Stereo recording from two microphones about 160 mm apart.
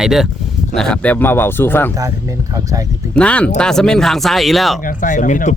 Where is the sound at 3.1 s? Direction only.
5° left (ahead or behind).